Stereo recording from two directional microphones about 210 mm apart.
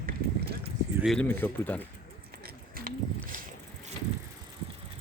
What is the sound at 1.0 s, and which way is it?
Speech, 5° left (ahead or behind).